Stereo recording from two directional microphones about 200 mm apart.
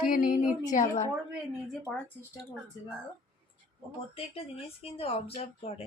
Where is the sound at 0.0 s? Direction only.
45° left (ahead or behind).